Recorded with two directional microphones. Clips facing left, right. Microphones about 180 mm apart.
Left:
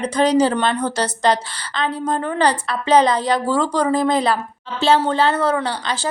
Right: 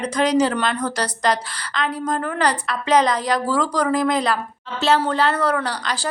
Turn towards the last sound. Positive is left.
turn(degrees=25)  # may be behind; listen again after turning